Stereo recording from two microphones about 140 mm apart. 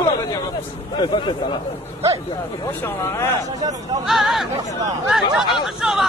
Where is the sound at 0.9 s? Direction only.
35° left (ahead or behind).